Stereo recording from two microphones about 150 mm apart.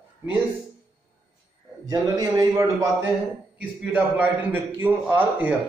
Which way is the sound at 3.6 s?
10° right (ahead or behind).